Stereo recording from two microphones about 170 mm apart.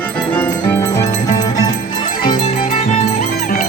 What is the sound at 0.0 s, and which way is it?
Music, 10° left (ahead or behind).